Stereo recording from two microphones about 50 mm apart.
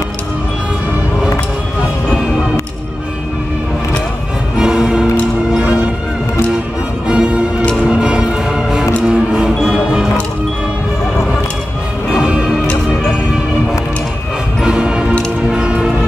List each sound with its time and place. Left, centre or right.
4.6 s music: centre
5.6 s music: right
7.1 s music: centre
12.1 s music: centre
14.6 s music: centre